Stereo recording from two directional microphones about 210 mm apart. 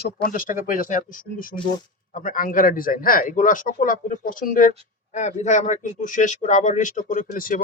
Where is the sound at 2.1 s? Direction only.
40° left (ahead or behind).